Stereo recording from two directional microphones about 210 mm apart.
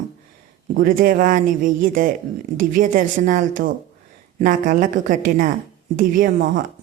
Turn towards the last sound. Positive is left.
turn(degrees=-40)  # may be behind; listen again after turning